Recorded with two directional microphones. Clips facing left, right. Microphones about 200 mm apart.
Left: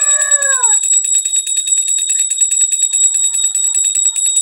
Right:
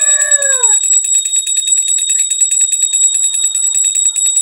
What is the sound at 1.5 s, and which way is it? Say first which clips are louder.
Bicycle bell: right 2 dB; 25° right (ahead or behind).